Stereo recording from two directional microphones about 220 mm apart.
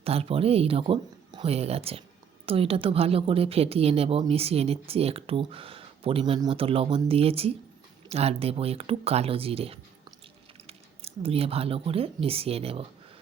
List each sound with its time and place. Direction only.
0.0 s speech: 25° right (ahead or behind)